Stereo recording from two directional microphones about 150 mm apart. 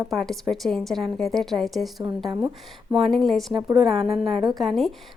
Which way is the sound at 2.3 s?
25° right (ahead or behind).